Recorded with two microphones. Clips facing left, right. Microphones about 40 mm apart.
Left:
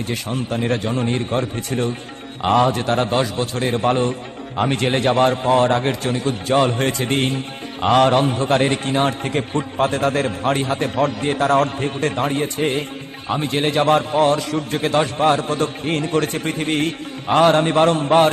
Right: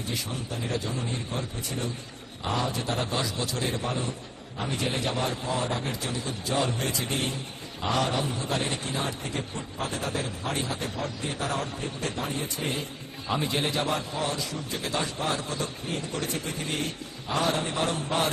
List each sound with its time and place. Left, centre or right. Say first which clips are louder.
0.1 s a man's voice: left 9 dB; left